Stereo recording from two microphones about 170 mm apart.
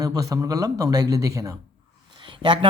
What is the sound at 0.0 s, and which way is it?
A man's voice, 20° right (ahead or behind).